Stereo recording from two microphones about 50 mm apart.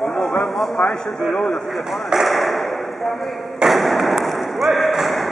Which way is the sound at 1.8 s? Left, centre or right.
Centre.